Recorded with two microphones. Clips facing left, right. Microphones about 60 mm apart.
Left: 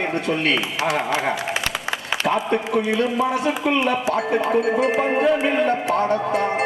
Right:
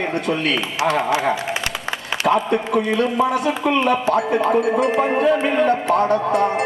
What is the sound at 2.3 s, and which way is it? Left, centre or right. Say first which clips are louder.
A man's voice: right 4 dB; centre.